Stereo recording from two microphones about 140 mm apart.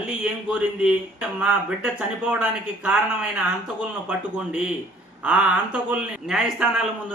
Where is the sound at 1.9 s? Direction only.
10° right (ahead or behind).